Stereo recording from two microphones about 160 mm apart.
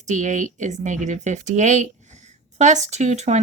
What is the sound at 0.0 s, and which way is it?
A woman's voice, 50° right (ahead or behind).